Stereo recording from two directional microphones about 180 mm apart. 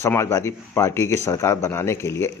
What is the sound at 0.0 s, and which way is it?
Speech, 15° left (ahead or behind).